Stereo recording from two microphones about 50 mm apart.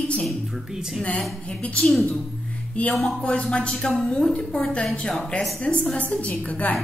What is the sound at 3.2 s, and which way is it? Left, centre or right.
A woman's voice, centre.